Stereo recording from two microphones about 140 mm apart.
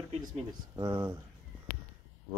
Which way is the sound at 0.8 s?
30° right (ahead or behind).